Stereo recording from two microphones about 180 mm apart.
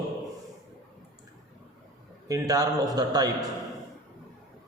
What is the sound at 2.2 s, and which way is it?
A man's voice, 20° right (ahead or behind).